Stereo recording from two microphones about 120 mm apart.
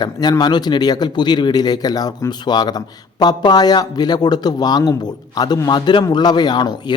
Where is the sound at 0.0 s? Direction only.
35° left (ahead or behind).